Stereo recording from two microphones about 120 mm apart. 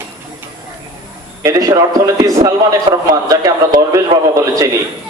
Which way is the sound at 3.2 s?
30° right (ahead or behind).